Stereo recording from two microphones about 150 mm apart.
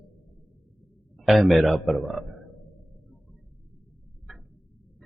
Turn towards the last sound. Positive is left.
turn(degrees=0)  # may be behind; listen again after turning